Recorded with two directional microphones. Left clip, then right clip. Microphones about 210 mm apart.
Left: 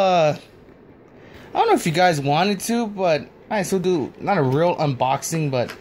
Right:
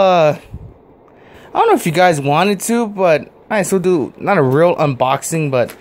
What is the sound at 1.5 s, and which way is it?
Speech, 10° right (ahead or behind).